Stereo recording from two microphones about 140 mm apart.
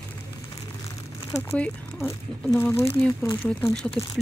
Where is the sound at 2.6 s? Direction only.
20° left (ahead or behind).